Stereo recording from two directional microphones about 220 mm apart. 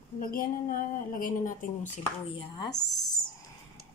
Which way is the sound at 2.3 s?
25° left (ahead or behind).